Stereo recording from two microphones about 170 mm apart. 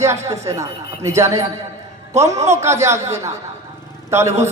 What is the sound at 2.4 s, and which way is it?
A man's voice, 15° right (ahead or behind).